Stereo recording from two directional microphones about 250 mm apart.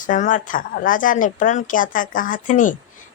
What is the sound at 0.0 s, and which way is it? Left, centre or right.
Speech, left.